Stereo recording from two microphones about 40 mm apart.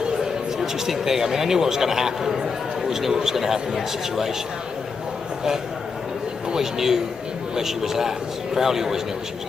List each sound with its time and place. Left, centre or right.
0.6 s a man's voice: centre
6.5 s a man's voice: centre